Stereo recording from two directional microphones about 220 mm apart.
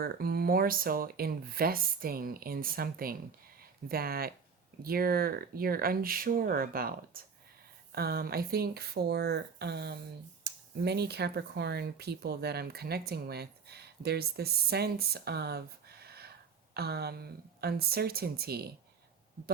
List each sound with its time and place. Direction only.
0.0 s speech: 45° right (ahead or behind)